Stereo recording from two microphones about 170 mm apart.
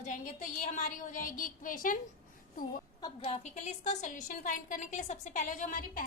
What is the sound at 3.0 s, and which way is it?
A woman's voice, 35° left (ahead or behind).